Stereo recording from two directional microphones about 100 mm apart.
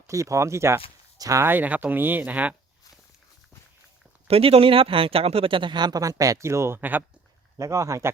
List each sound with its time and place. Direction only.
0.1 s speech: 30° right (ahead or behind); by 2.6 s 15° right (ahead or behind)
4.3 s speech: 75° right (ahead or behind); by 7.0 s 20° right (ahead or behind)
7.6 s speech: 30° right (ahead or behind)